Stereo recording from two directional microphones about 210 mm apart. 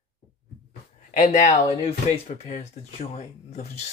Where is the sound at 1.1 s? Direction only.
35° left (ahead or behind).